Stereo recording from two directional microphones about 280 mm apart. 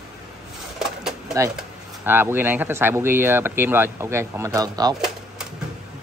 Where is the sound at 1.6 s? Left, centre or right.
Centre.